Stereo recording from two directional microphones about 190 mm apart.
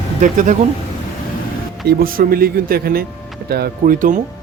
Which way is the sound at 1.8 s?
50° right (ahead or behind).